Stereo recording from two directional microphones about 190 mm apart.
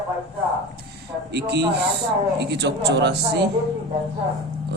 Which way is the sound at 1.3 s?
65° right (ahead or behind).